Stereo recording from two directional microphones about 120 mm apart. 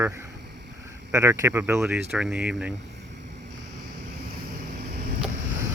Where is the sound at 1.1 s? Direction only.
25° right (ahead or behind).